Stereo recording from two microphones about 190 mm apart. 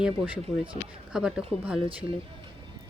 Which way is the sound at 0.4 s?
25° right (ahead or behind).